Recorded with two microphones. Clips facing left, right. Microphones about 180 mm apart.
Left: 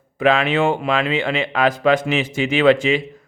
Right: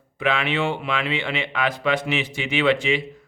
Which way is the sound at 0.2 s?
45° left (ahead or behind).